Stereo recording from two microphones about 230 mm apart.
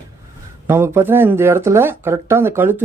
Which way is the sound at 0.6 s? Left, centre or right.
Centre.